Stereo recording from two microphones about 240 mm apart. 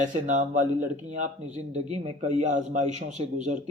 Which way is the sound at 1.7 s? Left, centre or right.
Right.